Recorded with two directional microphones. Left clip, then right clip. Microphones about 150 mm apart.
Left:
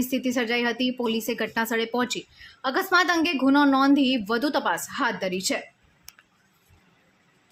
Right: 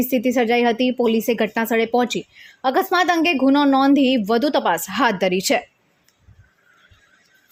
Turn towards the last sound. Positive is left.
turn(degrees=-45)  # may be behind; listen again after turning